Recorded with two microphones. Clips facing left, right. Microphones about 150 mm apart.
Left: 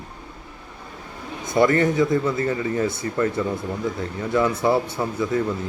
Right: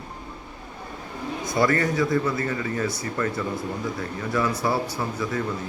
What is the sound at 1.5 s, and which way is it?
A man's voice, 25° left (ahead or behind).